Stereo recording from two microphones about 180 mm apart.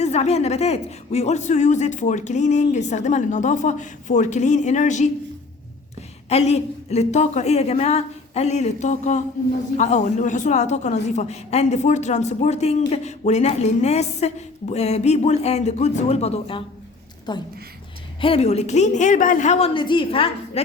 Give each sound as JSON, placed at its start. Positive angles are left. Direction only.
{"t": 0.0, "sound": "a man's voice", "side_deg": 40}
{"t": 6.2, "sound": "a man's voice", "side_deg": 35}